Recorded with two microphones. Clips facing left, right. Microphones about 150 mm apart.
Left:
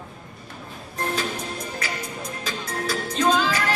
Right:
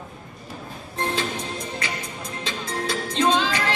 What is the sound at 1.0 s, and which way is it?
Music, 30° right (ahead or behind).